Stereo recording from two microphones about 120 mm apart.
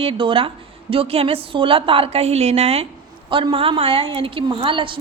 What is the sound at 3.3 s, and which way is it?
A woman's voice, 45° right (ahead or behind).